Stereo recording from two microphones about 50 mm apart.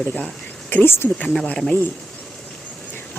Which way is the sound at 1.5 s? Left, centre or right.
Centre.